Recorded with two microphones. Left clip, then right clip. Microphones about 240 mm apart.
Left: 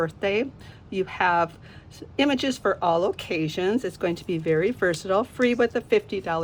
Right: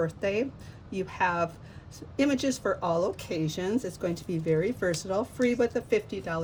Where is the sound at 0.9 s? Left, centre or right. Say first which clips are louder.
Left 5 dB; centre.